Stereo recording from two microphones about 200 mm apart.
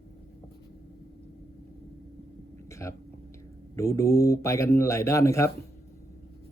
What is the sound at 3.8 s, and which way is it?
Speech, 15° left (ahead or behind).